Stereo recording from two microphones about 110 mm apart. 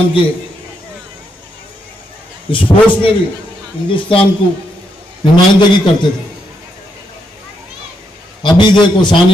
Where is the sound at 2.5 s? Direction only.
50° left (ahead or behind).